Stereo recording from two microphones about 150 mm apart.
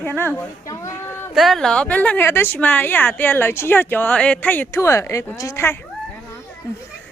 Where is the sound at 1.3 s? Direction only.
Centre (ahead or behind); by 5.7 s 20° left (ahead or behind).